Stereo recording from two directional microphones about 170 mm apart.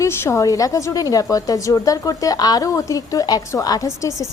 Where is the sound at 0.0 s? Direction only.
15° left (ahead or behind).